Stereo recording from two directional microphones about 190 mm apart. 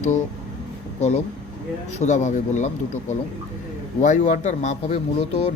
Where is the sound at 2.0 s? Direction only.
40° left (ahead or behind).